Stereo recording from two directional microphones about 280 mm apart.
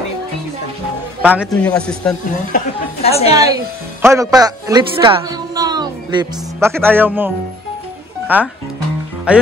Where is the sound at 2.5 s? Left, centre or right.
Left.